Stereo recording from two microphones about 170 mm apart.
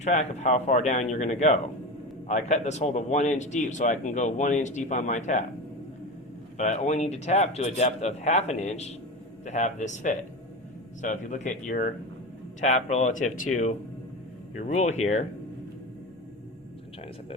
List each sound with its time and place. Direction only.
0.0 s a man's voice: 45° left (ahead or behind)
6.6 s a man's voice: 45° left (ahead or behind)